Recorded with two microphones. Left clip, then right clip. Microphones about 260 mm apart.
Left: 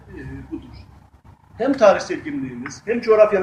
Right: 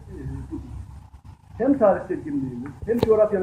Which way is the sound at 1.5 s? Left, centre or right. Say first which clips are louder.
Left 4 dB; centre.